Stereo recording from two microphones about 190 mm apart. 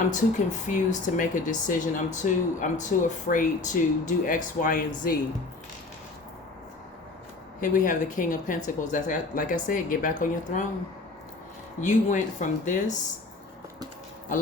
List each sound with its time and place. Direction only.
0.1 s speech: 40° left (ahead or behind)
7.6 s speech: 45° left (ahead or behind)
11.8 s speech: 40° left (ahead or behind)